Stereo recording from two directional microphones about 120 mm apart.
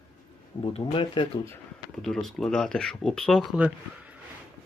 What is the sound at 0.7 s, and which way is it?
Speech, 45° left (ahead or behind).